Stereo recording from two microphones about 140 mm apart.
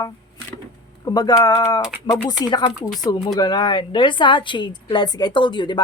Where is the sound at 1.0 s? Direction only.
30° left (ahead or behind).